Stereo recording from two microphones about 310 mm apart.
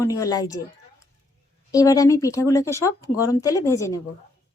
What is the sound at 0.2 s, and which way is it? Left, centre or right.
A woman's voice, centre.